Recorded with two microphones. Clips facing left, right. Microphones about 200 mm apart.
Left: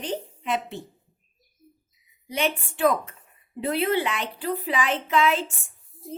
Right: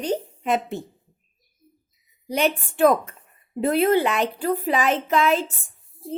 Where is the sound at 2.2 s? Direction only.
40° right (ahead or behind).